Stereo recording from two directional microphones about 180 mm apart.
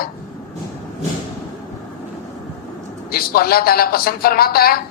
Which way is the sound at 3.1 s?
55° left (ahead or behind).